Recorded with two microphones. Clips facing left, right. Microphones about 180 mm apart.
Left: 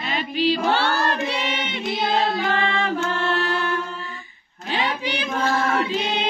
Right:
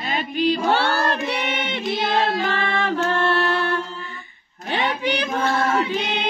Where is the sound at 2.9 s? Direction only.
60° right (ahead or behind).